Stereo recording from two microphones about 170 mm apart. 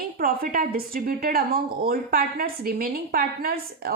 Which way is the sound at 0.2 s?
55° right (ahead or behind).